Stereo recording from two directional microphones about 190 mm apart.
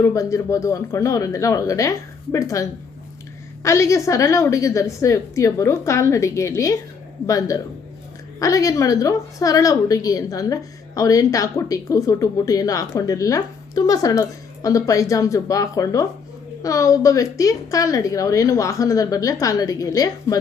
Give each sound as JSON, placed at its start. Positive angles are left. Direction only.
{"t": 0.0, "sound": "a woman's voice", "side_deg": 15}